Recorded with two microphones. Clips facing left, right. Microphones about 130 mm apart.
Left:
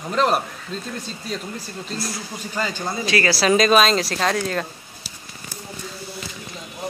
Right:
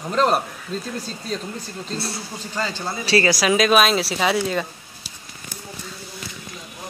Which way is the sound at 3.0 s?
35° right (ahead or behind).